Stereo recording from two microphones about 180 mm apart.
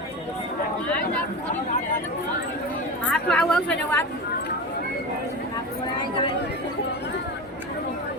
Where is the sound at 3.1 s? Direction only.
5° left (ahead or behind).